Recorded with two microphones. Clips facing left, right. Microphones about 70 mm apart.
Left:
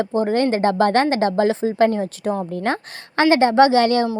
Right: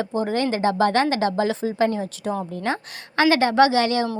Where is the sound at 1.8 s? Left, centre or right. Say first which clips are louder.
Left 4 dB; left.